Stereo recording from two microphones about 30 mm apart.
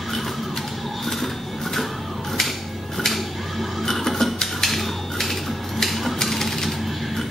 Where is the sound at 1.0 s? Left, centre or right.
Centre.